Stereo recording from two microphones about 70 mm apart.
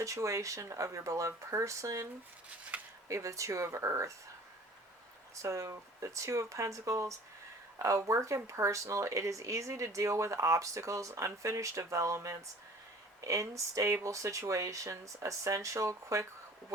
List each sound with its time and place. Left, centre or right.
0.0 s speech: right
2.7 s a sound: right
3.1 s speech: right
5.3 s speech: right